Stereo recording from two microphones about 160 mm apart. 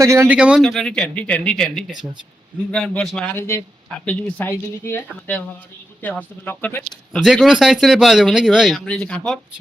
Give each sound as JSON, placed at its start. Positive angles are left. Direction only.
{"t": 0.0, "sound": "speech", "side_deg": -20}
{"t": 0.3, "sound": "speech", "side_deg": -5}
{"t": 7.3, "sound": "speech", "side_deg": 0}